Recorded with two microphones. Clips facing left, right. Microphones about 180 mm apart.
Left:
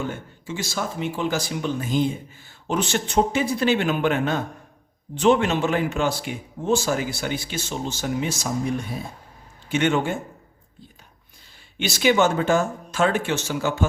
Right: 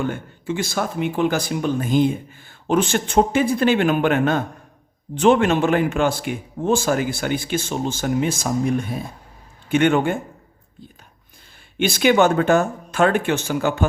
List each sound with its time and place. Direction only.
0.0 s speech: 55° right (ahead or behind)
11.8 s speech: 55° right (ahead or behind)